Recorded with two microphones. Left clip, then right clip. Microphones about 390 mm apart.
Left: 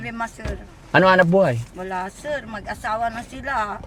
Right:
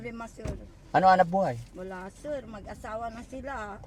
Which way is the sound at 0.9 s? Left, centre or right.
Left.